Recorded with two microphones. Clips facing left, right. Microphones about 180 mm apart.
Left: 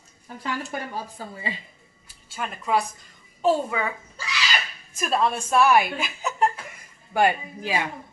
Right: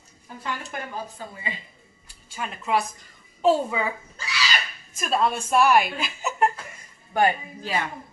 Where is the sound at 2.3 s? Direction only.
5° right (ahead or behind).